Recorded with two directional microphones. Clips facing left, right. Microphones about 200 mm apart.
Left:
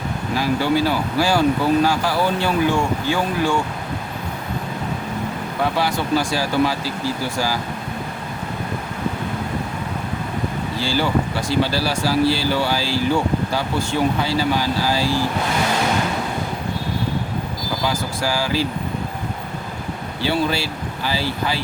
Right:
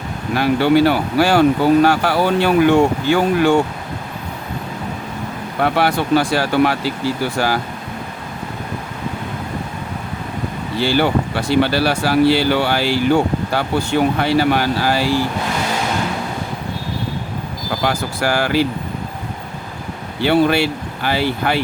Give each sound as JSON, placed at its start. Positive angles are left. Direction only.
{"t": 0.3, "sound": "speech", "side_deg": -65}
{"t": 5.6, "sound": "speech", "side_deg": -65}
{"t": 10.8, "sound": "speech", "side_deg": -65}
{"t": 14.2, "sound": "speech", "side_deg": -65}
{"t": 17.8, "sound": "speech", "side_deg": -65}
{"t": 20.2, "sound": "speech", "side_deg": -60}